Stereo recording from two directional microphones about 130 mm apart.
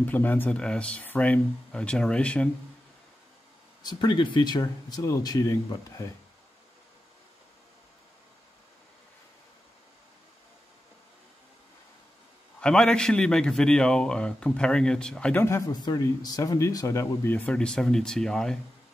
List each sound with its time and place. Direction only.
0.0 s a man's voice: 15° left (ahead or behind)
3.8 s speech: 35° left (ahead or behind)
12.5 s a man's voice: 5° left (ahead or behind)
15.4 s speech: 25° left (ahead or behind); by 18.6 s 5° left (ahead or behind)